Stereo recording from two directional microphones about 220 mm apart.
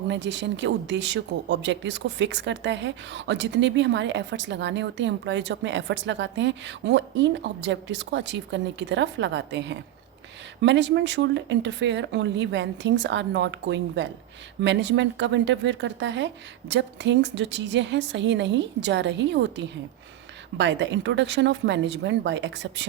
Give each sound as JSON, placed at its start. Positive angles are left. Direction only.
{"t": 0.1, "sound": "a woman's voice", "side_deg": -55}